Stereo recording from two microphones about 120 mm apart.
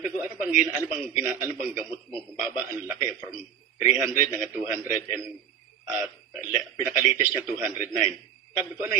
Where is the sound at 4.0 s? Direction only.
20° right (ahead or behind).